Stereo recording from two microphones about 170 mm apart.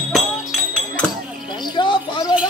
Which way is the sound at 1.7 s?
25° left (ahead or behind).